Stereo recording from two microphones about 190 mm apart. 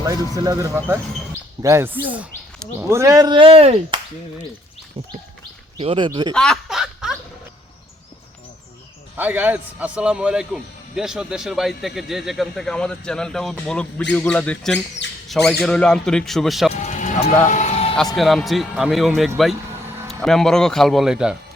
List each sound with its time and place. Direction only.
0.0 s speech: 20° right (ahead or behind)
5.7 s speech: 25° right (ahead or behind)
6.3 s snicker: 5° left (ahead or behind)
9.1 s a man's voice: 10° right (ahead or behind)
16.7 s music: 40° left (ahead or behind)
18.2 s a man's voice: centre (ahead or behind)